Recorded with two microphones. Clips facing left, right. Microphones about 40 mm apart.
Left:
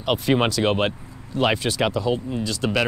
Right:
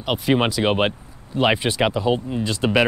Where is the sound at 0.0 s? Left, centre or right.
Centre.